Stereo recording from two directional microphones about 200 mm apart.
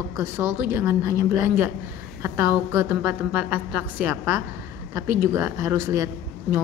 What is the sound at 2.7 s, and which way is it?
A woman's voice, 10° right (ahead or behind).